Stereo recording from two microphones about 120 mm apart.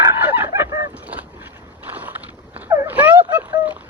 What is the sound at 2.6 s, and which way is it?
Speech, 20° right (ahead or behind).